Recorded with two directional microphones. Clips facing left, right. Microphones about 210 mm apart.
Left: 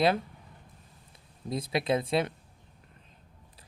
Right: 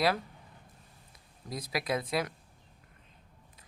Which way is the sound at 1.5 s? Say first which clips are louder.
Left 5 dB; 25° left (ahead or behind).